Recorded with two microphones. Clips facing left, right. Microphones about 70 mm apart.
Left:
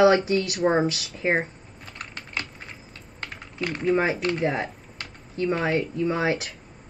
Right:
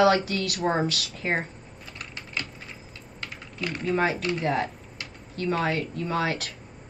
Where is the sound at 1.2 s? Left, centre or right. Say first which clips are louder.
Left 4 dB; left.